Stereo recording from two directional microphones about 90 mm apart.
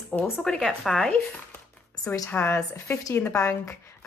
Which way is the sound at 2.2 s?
20° left (ahead or behind).